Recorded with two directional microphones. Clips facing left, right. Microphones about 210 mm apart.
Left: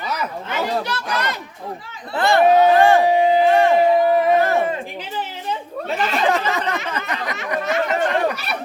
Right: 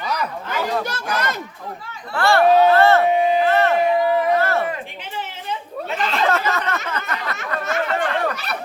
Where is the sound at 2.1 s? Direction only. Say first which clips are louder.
Even; 20° left (ahead or behind).